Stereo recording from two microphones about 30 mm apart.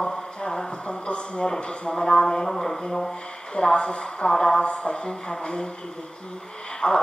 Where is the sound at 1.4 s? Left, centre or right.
Left.